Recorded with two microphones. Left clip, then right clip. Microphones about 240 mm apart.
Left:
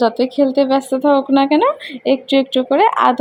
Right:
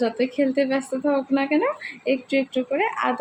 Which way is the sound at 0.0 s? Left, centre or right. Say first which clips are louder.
Left 8 dB; left.